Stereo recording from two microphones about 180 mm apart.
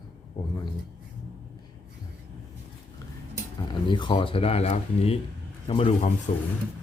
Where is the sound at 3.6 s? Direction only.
25° left (ahead or behind).